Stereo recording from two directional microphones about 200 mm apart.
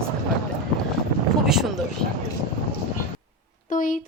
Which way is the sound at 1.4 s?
Centre (ahead or behind).